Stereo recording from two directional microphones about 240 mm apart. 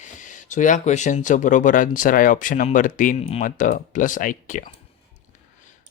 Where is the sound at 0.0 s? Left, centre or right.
Left.